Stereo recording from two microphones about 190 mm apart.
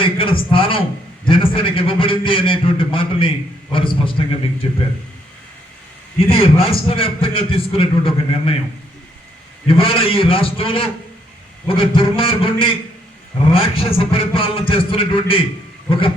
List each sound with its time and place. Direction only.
0.0 s a man's voice: 30° left (ahead or behind)
6.1 s a man's voice: 30° left (ahead or behind)
9.6 s a man's voice: 30° left (ahead or behind)